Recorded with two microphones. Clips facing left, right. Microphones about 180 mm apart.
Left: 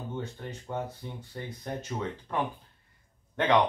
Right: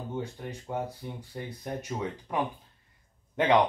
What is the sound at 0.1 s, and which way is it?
Speech, 15° right (ahead or behind).